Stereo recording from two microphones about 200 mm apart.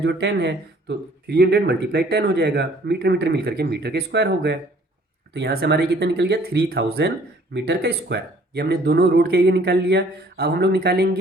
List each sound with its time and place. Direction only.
0.0 s speech: 55° right (ahead or behind)